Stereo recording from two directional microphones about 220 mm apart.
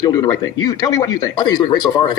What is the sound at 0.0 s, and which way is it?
A man's voice, 15° left (ahead or behind).